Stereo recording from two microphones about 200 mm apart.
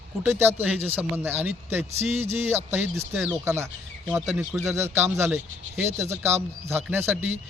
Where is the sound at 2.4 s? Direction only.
10° right (ahead or behind).